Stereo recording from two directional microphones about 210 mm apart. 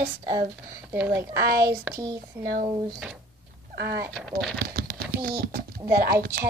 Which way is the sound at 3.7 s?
50° right (ahead or behind).